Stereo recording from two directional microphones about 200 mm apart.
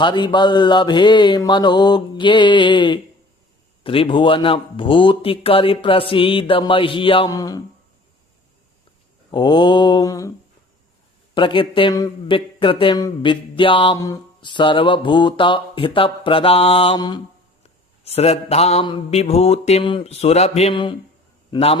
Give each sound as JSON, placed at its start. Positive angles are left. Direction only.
{"t": 0.0, "sound": "speech", "side_deg": 25}
{"t": 9.3, "sound": "speech", "side_deg": 20}
{"t": 11.3, "sound": "speech", "side_deg": 25}
{"t": 17.6, "sound": "mantra", "side_deg": 30}
{"t": 21.5, "sound": "a man's voice", "side_deg": 30}